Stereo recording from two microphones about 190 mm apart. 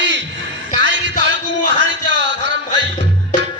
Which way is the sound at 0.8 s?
70° right (ahead or behind).